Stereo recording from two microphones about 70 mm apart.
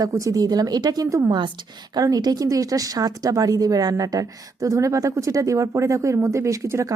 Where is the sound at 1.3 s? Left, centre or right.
Right.